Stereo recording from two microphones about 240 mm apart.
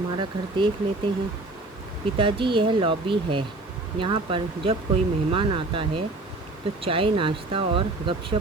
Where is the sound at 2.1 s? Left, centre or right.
Right.